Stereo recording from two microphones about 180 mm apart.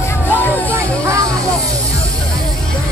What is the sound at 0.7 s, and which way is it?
Music, 15° right (ahead or behind).